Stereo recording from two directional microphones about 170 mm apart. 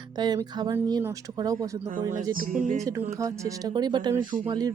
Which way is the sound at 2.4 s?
50° right (ahead or behind).